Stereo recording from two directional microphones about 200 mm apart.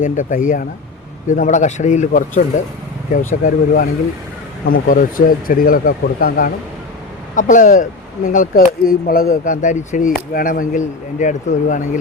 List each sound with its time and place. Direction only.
0.0 s speech: 40° left (ahead or behind)